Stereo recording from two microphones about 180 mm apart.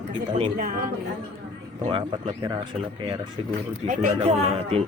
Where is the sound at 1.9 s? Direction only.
30° right (ahead or behind).